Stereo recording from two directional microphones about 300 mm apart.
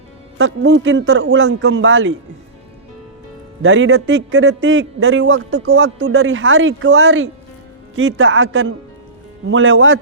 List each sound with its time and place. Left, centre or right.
0.3 s a man's voice: right
3.6 s a man's voice: right